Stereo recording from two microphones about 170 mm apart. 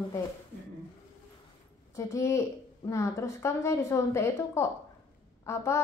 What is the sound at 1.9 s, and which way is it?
A woman's voice, 20° left (ahead or behind).